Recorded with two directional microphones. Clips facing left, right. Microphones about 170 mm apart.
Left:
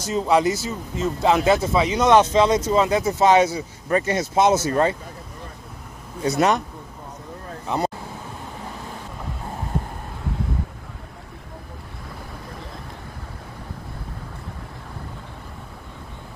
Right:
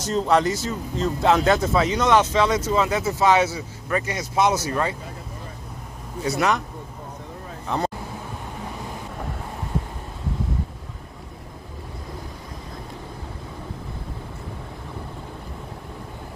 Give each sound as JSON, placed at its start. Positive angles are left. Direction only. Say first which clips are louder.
{"t": 0.0, "sound": "speech", "louder": "left 1 dB", "side_deg": 5}
{"t": 2.0, "sound": "speech", "louder": "left 5 dB", "side_deg": 20}
{"t": 3.5, "sound": "speech", "louder": "left 4 dB", "side_deg": 30}
{"t": 6.2, "sound": "speech", "louder": "left 3 dB", "side_deg": 20}
{"t": 7.6, "sound": "speech", "louder": "left 1 dB", "side_deg": 10}